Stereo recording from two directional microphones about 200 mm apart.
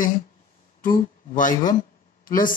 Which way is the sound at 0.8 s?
45° left (ahead or behind).